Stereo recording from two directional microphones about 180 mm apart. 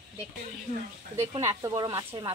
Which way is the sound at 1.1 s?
15° right (ahead or behind).